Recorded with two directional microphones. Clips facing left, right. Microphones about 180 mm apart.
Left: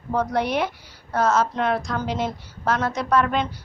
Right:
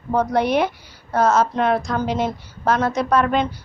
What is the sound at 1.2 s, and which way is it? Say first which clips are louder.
Speech: right 3 dB; 50° right (ahead or behind).